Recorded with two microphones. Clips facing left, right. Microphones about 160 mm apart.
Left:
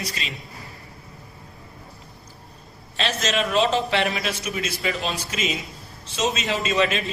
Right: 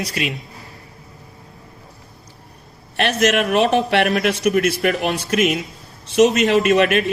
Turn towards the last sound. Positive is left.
turn(degrees=-65)  # may be behind; listen again after turning